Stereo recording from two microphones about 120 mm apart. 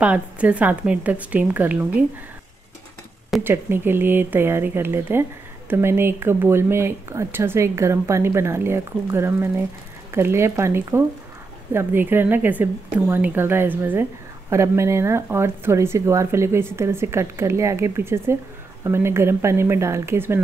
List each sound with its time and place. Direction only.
0.0 s a woman's voice: 10° right (ahead or behind)
3.4 s a woman's voice: 15° right (ahead or behind)